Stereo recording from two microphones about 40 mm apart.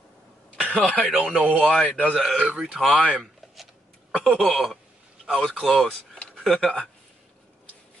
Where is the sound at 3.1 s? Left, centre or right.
Centre.